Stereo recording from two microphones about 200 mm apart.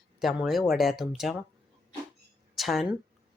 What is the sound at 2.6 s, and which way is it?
Speech, centre (ahead or behind).